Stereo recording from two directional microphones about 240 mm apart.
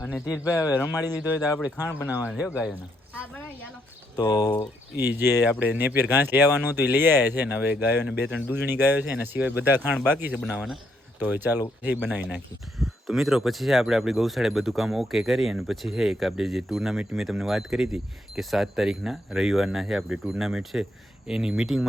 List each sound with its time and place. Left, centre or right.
0.0 s speech: centre
1.5 s speech: centre
2.2 s speech: centre
4.2 s speech: centre
4.9 s speech: centre